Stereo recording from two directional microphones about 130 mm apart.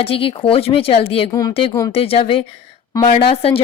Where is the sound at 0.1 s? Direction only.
45° left (ahead or behind).